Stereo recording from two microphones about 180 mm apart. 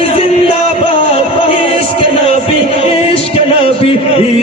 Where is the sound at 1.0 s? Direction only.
30° left (ahead or behind).